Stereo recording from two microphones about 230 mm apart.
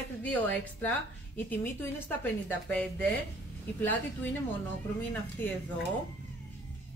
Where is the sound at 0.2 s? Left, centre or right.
Centre.